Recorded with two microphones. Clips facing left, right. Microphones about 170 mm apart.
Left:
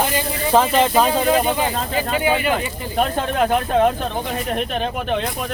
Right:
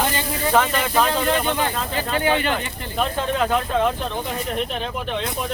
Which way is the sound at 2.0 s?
10° left (ahead or behind).